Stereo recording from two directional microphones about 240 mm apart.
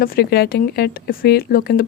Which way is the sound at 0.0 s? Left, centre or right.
Left.